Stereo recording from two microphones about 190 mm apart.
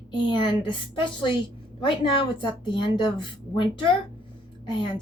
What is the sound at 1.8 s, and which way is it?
A woman's voice, 25° left (ahead or behind).